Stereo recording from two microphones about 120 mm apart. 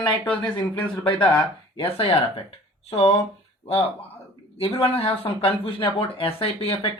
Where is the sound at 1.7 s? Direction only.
50° left (ahead or behind).